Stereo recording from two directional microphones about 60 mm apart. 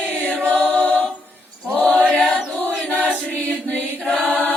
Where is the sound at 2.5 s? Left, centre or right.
Left.